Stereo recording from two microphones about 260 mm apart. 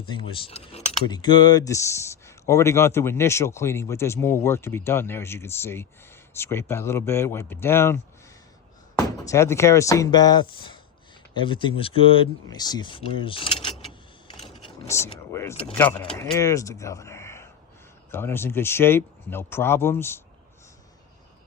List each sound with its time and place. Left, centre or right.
0.1 s speech: left
14.3 s mechanisms: centre
15.6 s speech: centre